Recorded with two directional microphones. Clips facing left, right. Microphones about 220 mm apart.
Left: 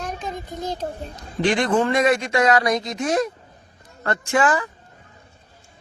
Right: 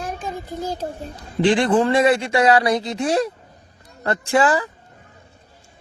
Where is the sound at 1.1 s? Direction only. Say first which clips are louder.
Right 4 dB; 30° right (ahead or behind).